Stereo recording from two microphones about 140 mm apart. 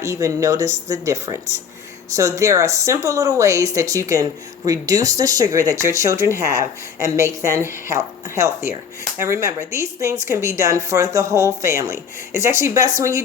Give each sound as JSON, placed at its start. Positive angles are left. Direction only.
{"t": 0.0, "sound": "speech", "side_deg": -20}